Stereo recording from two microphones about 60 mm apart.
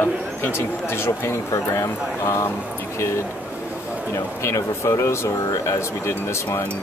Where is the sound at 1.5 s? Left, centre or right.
Left.